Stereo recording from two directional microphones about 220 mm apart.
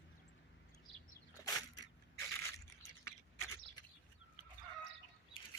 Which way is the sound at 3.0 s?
10° left (ahead or behind).